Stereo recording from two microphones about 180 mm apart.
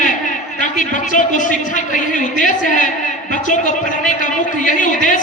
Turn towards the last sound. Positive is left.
turn(degrees=45)  # may be behind; listen again after turning